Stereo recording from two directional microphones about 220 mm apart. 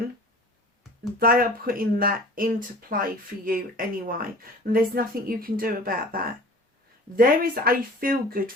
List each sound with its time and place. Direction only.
1.2 s speech: 40° right (ahead or behind)